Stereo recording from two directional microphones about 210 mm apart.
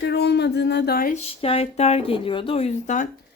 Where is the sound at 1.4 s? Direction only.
30° left (ahead or behind).